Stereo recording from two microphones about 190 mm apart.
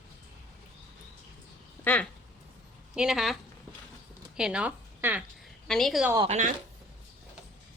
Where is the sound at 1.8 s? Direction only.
10° left (ahead or behind).